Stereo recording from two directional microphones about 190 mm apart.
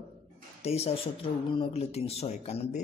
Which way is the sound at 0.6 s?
35° left (ahead or behind).